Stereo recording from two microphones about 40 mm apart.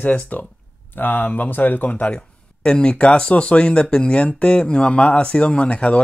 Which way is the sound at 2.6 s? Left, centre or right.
Left.